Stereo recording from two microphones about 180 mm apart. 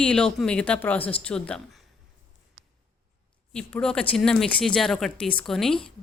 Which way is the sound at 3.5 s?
5° left (ahead or behind).